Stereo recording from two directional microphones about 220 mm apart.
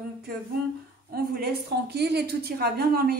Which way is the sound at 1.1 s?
45° right (ahead or behind).